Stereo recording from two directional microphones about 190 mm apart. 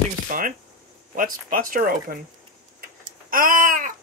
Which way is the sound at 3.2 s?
45° right (ahead or behind).